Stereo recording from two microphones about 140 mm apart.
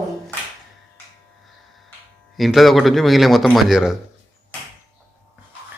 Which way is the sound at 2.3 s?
Centre (ahead or behind).